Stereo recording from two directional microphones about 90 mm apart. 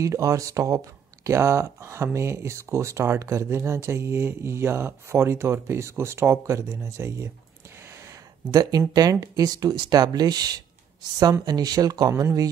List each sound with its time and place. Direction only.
0.0 s speech: 35° right (ahead or behind)
8.5 s speech: 45° right (ahead or behind)